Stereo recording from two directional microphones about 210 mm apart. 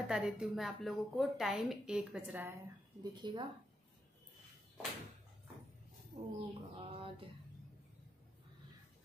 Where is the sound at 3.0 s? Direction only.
20° right (ahead or behind).